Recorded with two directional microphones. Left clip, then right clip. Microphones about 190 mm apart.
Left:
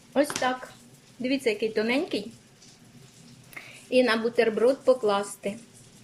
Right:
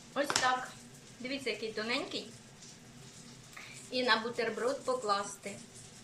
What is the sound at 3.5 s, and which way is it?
A woman's voice, 45° left (ahead or behind).